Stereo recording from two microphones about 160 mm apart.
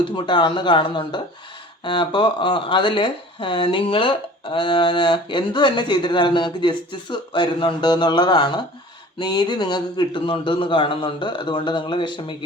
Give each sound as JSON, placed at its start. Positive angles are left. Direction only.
{"t": 0.0, "sound": "speech", "side_deg": 30}